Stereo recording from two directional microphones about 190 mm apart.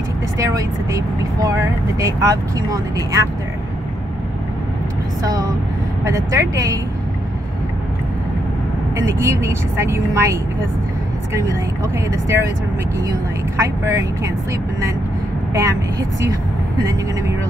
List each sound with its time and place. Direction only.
0.4 s speech: 15° right (ahead or behind)
5.2 s speech: 20° right (ahead or behind)
9.2 s speech: 15° right (ahead or behind)
13.6 s speech: 15° right (ahead or behind)
15.5 s speech: 15° right (ahead or behind)